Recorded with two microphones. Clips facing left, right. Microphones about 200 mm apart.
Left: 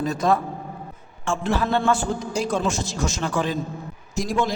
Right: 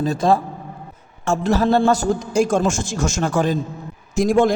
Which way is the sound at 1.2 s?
40° right (ahead or behind).